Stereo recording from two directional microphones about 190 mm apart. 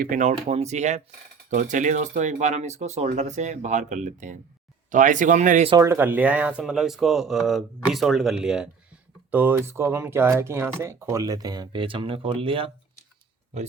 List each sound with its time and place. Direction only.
0.0 s speech: 45° right (ahead or behind)
5.7 s speech: 15° right (ahead or behind)